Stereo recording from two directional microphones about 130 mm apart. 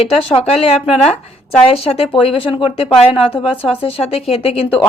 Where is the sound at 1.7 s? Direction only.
50° left (ahead or behind).